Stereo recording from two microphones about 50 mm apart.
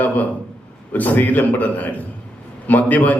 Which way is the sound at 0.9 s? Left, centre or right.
Left.